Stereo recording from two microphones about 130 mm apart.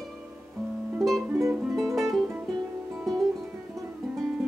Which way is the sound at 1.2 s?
20° right (ahead or behind).